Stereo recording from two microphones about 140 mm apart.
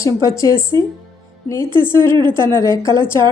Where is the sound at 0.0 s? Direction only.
25° left (ahead or behind).